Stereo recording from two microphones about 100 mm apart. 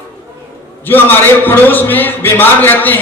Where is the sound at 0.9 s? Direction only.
20° left (ahead or behind).